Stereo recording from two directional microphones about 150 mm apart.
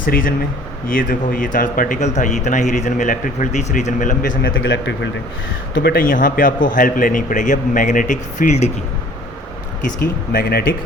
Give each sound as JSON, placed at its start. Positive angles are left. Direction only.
{"t": 0.0, "sound": "speech", "side_deg": 70}
{"t": 5.8, "sound": "speech", "side_deg": 80}
{"t": 10.3, "sound": "speech", "side_deg": 80}